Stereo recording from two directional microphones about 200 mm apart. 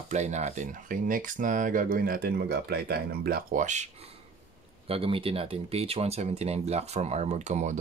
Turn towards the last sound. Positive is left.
turn(degrees=-35)  # may be behind; listen again after turning